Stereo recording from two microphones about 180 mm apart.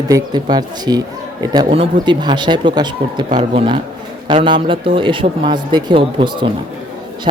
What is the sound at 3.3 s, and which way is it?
Speech, 35° right (ahead or behind).